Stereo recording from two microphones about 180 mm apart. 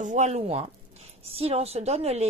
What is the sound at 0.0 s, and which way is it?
A woman's voice, 40° right (ahead or behind).